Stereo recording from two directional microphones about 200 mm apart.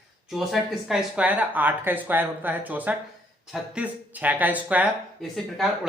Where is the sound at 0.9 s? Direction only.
5° right (ahead or behind).